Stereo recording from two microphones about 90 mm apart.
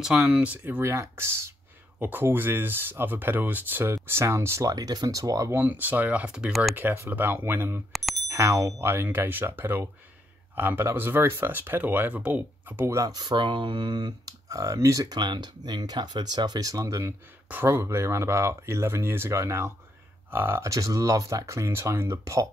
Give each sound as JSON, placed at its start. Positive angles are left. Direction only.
{"t": 0.0, "sound": "speech", "side_deg": -5}
{"t": 4.7, "sound": "speech", "side_deg": -45}
{"t": 5.5, "sound": "speech", "side_deg": -20}
{"t": 6.7, "sound": "speech", "side_deg": -25}
{"t": 7.9, "sound": "bicycle bell", "side_deg": 0}
{"t": 8.3, "sound": "speech", "side_deg": -30}
{"t": 12.9, "sound": "speech", "side_deg": -40}
{"t": 13.2, "sound": "speech", "side_deg": -60}
{"t": 15.1, "sound": "speech", "side_deg": -50}
{"t": 20.6, "sound": "speech", "side_deg": -35}